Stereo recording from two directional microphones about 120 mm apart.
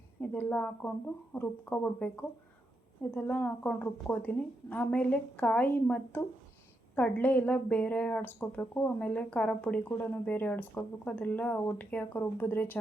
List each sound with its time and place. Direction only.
0.2 s a woman's voice: 15° left (ahead or behind)
3.2 s speech: 15° left (ahead or behind)